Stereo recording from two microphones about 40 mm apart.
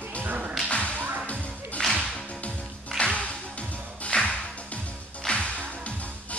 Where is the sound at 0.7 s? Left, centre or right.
Left.